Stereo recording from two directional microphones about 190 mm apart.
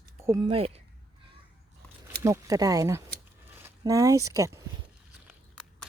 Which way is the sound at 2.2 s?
15° right (ahead or behind).